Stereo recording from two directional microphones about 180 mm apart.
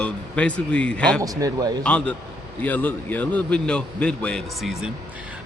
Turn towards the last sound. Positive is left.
turn(degrees=-5)  # may be behind; listen again after turning